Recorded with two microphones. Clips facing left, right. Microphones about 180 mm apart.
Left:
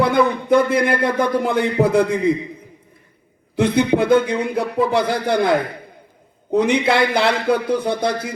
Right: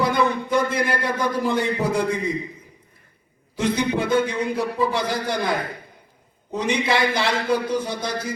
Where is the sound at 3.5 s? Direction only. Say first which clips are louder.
Left 6 dB; 60° left (ahead or behind).